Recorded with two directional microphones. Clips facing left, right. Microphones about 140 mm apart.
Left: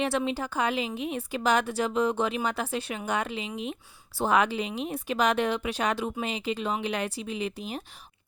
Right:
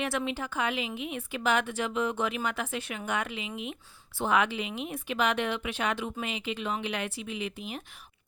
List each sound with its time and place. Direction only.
0.0 s speech: 30° left (ahead or behind)